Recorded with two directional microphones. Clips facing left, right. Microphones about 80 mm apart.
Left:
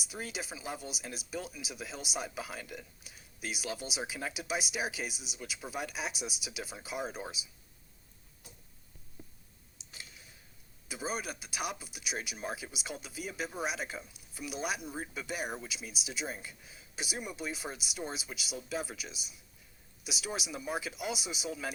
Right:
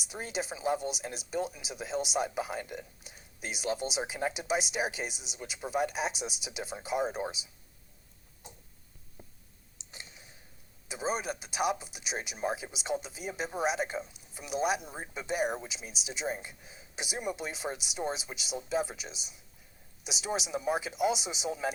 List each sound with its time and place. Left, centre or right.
0.1 s speech: right
9.2 s clicking: right
10.9 s speech: right
15.4 s speech: centre
20.2 s speech: right